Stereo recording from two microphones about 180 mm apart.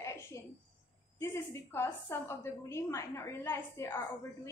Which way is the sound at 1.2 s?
15° left (ahead or behind).